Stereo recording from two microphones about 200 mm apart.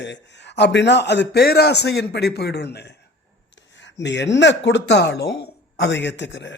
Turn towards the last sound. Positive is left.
turn(degrees=60)  # may be behind; listen again after turning